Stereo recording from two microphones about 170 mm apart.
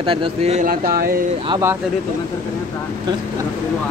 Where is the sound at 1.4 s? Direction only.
20° right (ahead or behind).